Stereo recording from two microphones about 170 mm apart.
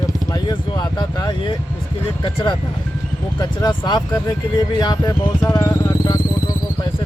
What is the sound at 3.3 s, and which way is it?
Speech, 25° left (ahead or behind).